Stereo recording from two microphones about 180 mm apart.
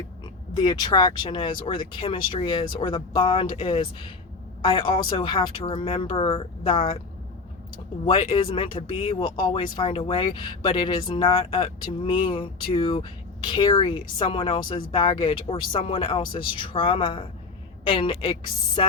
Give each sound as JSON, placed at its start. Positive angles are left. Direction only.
{"t": 0.5, "sound": "speech", "side_deg": 20}
{"t": 8.0, "sound": "speech", "side_deg": 30}